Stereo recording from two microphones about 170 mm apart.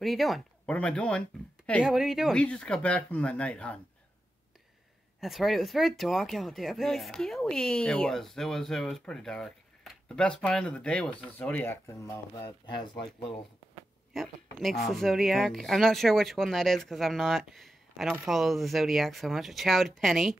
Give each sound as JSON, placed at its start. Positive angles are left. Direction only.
{"t": 0.0, "sound": "speech", "side_deg": 0}
{"t": 5.2, "sound": "speech", "side_deg": 0}
{"t": 14.1, "sound": "speech", "side_deg": 0}